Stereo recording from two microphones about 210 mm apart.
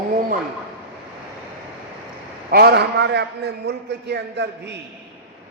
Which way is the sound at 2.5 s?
45° right (ahead or behind).